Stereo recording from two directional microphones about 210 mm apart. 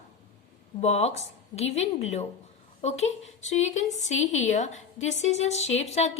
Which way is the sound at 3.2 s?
35° left (ahead or behind).